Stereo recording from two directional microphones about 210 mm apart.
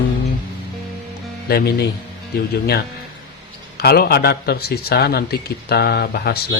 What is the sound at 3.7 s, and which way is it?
A man's voice, 50° left (ahead or behind).